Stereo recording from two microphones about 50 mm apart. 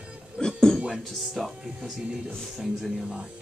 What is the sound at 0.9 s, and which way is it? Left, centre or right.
Speech, centre.